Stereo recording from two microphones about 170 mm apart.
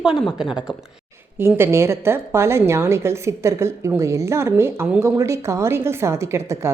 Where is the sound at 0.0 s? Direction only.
5° right (ahead or behind).